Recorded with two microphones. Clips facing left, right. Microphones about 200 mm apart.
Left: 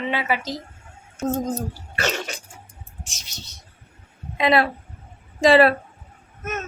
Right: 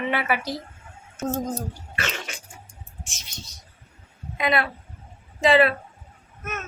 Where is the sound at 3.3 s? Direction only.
75° left (ahead or behind).